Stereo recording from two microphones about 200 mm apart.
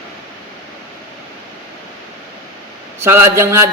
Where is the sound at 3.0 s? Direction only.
10° right (ahead or behind).